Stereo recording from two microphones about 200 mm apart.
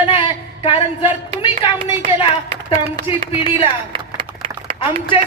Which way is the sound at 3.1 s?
30° left (ahead or behind).